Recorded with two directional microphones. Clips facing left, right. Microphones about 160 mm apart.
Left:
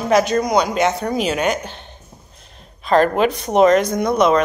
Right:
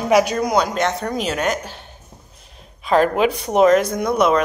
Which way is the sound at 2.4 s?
5° right (ahead or behind).